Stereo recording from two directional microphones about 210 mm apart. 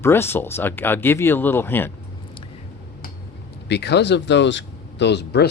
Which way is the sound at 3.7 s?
55° left (ahead or behind).